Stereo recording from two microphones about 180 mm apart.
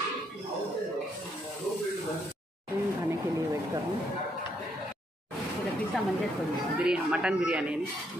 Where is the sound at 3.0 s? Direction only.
20° right (ahead or behind).